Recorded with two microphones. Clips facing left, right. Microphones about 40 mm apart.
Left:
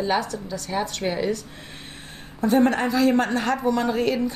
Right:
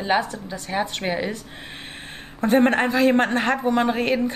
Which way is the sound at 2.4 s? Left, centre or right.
Right.